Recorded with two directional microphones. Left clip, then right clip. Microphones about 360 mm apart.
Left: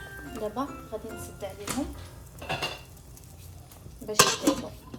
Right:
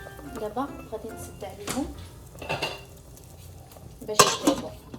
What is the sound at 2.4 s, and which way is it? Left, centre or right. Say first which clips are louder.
Dishes: right 2 dB; centre.